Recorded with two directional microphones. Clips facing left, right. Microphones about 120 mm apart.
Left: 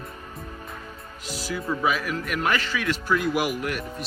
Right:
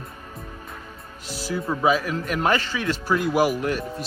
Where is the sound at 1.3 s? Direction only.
30° right (ahead or behind).